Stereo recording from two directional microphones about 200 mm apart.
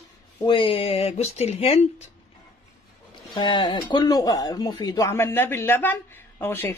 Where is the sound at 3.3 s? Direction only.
20° left (ahead or behind).